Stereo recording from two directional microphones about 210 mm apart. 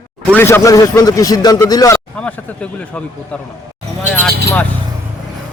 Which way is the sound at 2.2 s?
5° left (ahead or behind).